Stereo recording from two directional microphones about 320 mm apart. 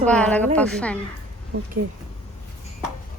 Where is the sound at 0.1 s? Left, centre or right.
Centre.